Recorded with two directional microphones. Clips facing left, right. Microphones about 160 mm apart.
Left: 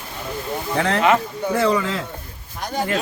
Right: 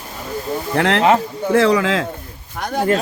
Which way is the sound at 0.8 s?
75° right (ahead or behind).